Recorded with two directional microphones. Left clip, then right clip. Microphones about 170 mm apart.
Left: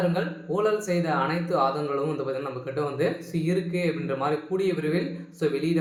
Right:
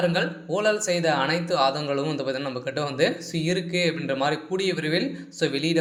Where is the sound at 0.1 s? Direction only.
30° right (ahead or behind).